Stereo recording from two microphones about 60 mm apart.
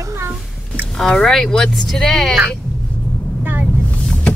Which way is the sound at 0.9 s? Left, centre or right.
Centre.